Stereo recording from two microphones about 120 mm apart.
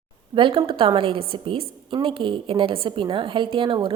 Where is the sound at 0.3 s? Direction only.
45° right (ahead or behind).